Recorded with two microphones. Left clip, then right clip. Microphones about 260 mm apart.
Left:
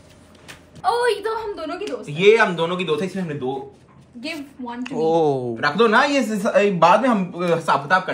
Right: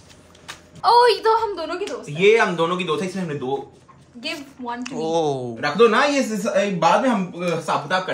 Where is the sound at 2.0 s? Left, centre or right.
Centre.